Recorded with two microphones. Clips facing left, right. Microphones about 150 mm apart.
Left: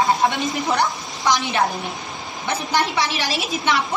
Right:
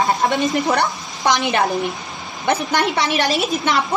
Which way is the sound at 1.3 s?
55° right (ahead or behind).